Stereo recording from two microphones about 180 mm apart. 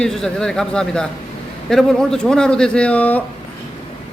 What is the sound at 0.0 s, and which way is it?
A man's voice, 5° left (ahead or behind).